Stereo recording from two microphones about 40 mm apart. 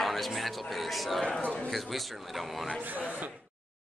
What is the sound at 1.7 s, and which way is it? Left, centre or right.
A man's voice, centre.